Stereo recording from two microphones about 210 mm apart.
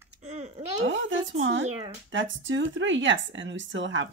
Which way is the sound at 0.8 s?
65° right (ahead or behind).